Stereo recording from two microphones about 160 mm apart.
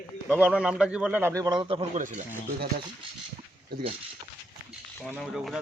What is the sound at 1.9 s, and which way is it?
Speech, 50° right (ahead or behind).